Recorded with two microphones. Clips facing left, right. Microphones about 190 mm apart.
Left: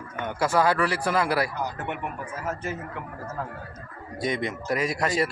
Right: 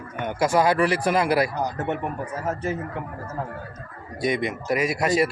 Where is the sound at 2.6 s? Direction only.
20° right (ahead or behind).